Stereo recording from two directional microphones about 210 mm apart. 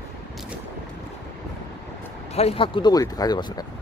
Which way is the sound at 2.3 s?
30° left (ahead or behind).